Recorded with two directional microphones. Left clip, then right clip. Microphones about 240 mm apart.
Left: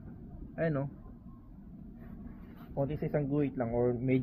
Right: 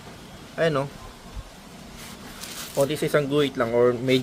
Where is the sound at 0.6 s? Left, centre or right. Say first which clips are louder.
Right 11 dB; centre.